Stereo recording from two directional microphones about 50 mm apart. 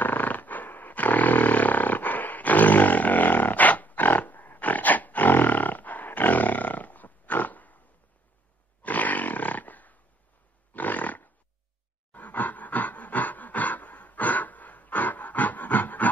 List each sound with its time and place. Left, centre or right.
0.0 s roar: left
8.8 s roar: left
10.7 s roaring cats: left
12.1 s a sound: left